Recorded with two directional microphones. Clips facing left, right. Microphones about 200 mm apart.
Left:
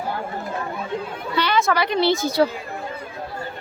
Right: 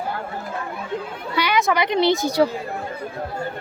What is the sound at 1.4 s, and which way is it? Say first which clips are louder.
A woman's voice: even; 15° right (ahead or behind).